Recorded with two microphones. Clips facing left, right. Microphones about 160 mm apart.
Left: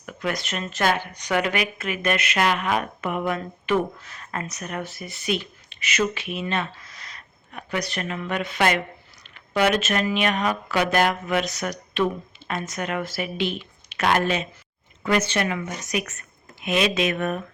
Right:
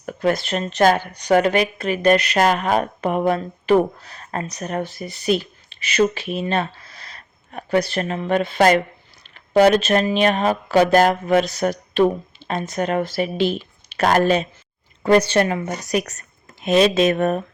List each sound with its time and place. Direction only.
0.0 s a woman's voice: 35° right (ahead or behind)